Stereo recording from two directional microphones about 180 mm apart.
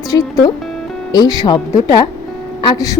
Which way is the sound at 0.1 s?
20° left (ahead or behind).